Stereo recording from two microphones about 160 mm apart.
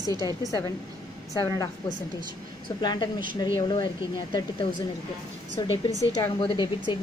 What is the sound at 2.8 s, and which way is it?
A woman's voice, 25° left (ahead or behind).